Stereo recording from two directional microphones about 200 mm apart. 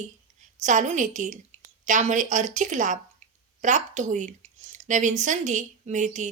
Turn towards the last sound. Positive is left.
turn(degrees=-35)  # may be behind; listen again after turning